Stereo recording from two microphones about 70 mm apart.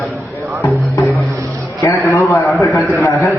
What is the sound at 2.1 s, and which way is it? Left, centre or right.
A man's voice, left.